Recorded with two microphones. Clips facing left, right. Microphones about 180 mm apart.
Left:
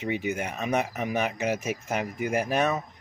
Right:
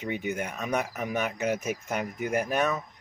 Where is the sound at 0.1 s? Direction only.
10° left (ahead or behind).